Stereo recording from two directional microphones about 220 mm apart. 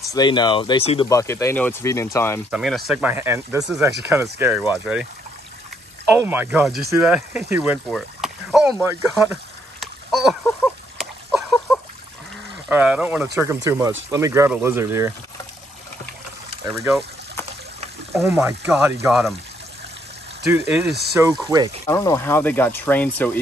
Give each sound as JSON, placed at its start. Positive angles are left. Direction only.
{"t": 0.1, "sound": "speech", "side_deg": 20}
{"t": 1.0, "sound": "speech", "side_deg": 15}
{"t": 2.5, "sound": "speech", "side_deg": 0}
{"t": 6.0, "sound": "speech", "side_deg": -10}
{"t": 9.1, "sound": "a sound", "side_deg": 0}
{"t": 12.6, "sound": "speech", "side_deg": -5}
{"t": 16.6, "sound": "speech", "side_deg": -5}
{"t": 18.2, "sound": "speech", "side_deg": -5}
{"t": 20.5, "sound": "speech", "side_deg": 25}
{"t": 21.2, "sound": "speech", "side_deg": -15}
{"t": 21.8, "sound": "speech", "side_deg": 15}